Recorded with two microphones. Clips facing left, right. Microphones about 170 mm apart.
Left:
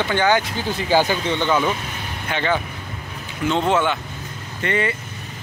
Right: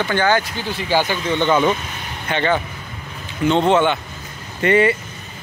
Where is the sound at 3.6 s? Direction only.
5° left (ahead or behind).